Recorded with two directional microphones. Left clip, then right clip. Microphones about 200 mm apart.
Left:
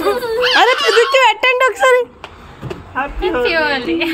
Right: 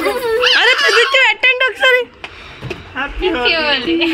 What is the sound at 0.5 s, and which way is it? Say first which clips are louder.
Speech: left 2 dB; 10° left (ahead or behind).